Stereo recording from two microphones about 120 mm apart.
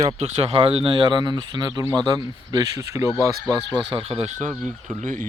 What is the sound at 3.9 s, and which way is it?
Speech, 50° right (ahead or behind).